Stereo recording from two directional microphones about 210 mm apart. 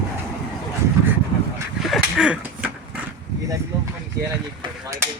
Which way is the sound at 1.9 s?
5° right (ahead or behind).